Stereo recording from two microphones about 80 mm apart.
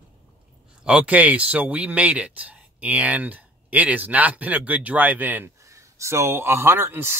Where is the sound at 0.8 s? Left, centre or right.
Centre.